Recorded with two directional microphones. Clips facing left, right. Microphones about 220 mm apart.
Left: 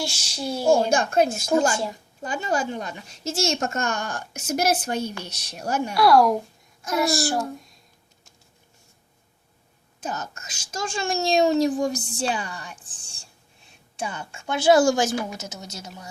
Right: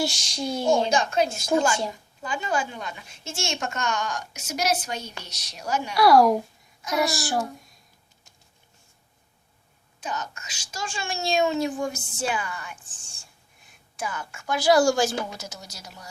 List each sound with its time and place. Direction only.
0.0 s speech: 5° left (ahead or behind)
0.7 s a woman's voice: 50° left (ahead or behind)
6.0 s speech: centre (ahead or behind)
10.0 s a woman's voice: 40° left (ahead or behind)
13.9 s a woman's voice: 30° left (ahead or behind)